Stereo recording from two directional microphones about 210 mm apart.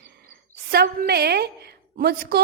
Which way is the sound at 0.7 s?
45° right (ahead or behind).